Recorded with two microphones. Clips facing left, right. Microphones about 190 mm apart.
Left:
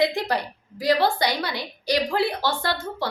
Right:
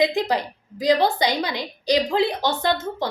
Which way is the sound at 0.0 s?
15° right (ahead or behind).